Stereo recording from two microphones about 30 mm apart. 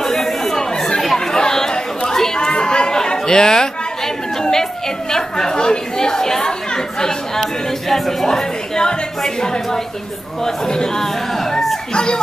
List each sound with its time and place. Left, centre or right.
0.0 s chatter: centre
4.4 s a sound: centre
7.9 s a woman's voice: centre
11.9 s speech: left